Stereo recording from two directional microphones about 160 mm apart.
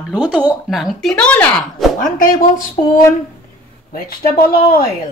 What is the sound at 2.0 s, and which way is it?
Speech, 60° left (ahead or behind).